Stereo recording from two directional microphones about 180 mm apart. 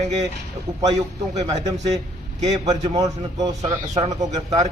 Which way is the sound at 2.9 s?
20° right (ahead or behind).